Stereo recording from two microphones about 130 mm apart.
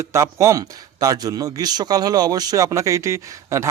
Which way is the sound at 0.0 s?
20° right (ahead or behind).